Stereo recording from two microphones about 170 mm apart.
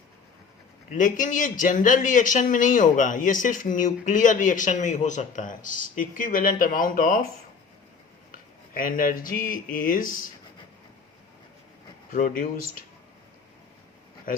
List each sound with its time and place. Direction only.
0.9 s a man's voice: 50° left (ahead or behind)
8.3 s speech: 55° left (ahead or behind)
12.1 s a man's voice: 50° left (ahead or behind)